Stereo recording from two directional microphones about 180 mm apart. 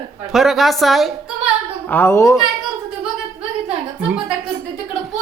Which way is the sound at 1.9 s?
15° left (ahead or behind).